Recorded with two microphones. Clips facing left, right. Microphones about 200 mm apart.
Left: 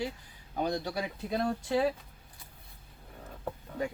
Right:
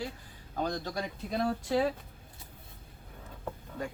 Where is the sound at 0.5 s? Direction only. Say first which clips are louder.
Left 2 dB; 15° left (ahead or behind).